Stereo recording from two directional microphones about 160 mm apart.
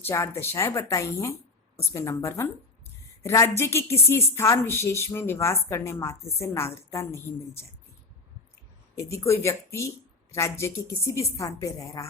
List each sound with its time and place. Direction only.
0.0 s a woman's voice: 15° left (ahead or behind)
9.0 s a woman's voice: 15° left (ahead or behind)